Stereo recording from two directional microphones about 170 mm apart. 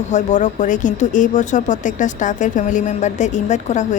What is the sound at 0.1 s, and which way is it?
Speech, 45° left (ahead or behind).